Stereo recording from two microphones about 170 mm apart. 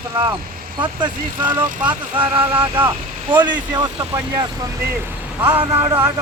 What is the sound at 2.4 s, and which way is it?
Speech, 30° right (ahead or behind).